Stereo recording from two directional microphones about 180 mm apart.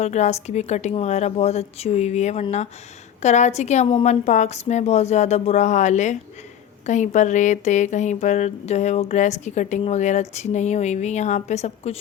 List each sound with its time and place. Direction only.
0.0 s speech: 40° left (ahead or behind)